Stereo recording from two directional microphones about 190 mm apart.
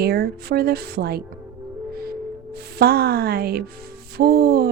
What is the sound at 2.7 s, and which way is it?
Speech, 55° right (ahead or behind).